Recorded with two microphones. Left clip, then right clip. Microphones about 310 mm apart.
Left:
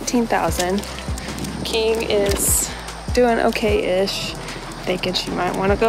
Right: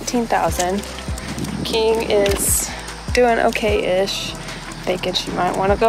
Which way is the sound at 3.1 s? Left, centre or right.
Centre.